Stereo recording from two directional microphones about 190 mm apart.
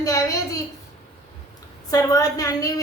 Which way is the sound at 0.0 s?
15° left (ahead or behind).